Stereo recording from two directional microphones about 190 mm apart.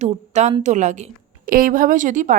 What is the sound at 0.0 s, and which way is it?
A woman's voice, 35° right (ahead or behind).